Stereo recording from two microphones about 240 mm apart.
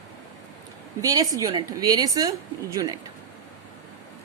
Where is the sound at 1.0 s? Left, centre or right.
Centre.